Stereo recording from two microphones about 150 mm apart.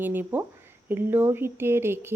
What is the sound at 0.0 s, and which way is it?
A woman's voice, 10° right (ahead or behind).